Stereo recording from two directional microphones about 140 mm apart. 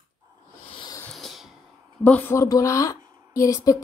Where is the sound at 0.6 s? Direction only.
35° left (ahead or behind).